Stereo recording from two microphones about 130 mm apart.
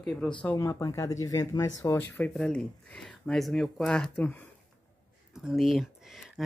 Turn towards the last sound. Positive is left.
turn(degrees=0)  # may be behind; listen again after turning